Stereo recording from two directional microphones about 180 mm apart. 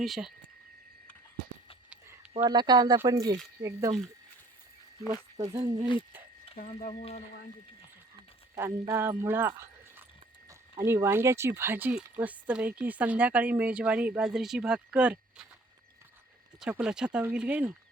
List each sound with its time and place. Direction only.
0.0 s speech: centre (ahead or behind)
2.4 s speech: 25° right (ahead or behind)
5.0 s speech: 40° right (ahead or behind)
5.5 s speech: 20° right (ahead or behind)
8.9 s speech: 15° right (ahead or behind)
16.6 s speech: 5° right (ahead or behind)